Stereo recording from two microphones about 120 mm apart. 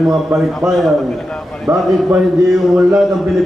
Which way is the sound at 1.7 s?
25° right (ahead or behind).